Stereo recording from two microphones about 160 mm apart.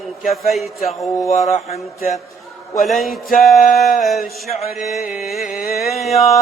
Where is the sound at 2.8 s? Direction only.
Centre (ahead or behind).